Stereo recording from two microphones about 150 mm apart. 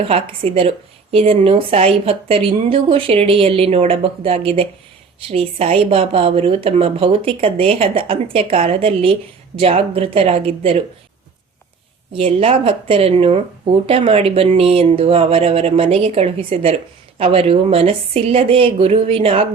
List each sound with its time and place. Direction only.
0.1 s a woman's voice: 35° right (ahead or behind)
12.1 s a woman's voice: 40° right (ahead or behind)